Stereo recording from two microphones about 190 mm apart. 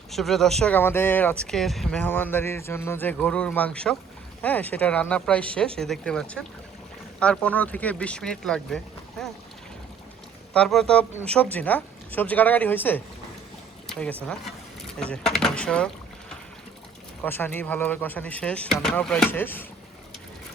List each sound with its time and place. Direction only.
0.1 s speech: centre (ahead or behind)
10.5 s speech: 5° left (ahead or behind)
17.2 s speech: 10° left (ahead or behind)